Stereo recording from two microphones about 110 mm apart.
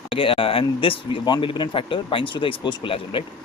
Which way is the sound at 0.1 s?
55° left (ahead or behind).